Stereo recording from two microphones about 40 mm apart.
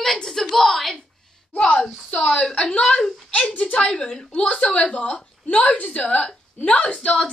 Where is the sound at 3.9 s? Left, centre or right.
Left.